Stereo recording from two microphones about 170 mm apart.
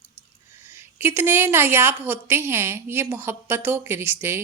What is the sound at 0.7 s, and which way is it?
Speech, 10° right (ahead or behind).